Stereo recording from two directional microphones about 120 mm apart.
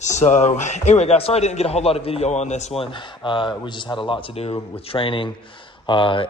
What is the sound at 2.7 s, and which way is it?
Speech, 45° left (ahead or behind).